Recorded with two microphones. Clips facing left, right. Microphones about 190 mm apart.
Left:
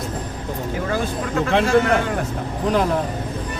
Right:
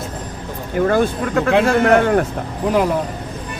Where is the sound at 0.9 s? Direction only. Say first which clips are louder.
Right 8 dB; 60° right (ahead or behind).